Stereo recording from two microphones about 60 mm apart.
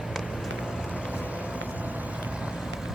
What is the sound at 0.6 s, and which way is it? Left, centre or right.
Vehicle, centre.